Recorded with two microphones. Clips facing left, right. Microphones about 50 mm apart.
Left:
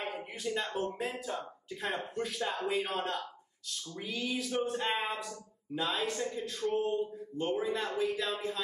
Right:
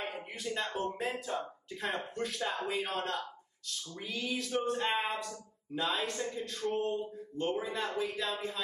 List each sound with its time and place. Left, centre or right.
0.1 s speech: centre